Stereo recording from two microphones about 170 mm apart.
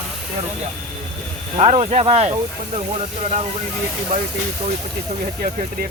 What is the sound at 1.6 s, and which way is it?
Speech, 40° right (ahead or behind).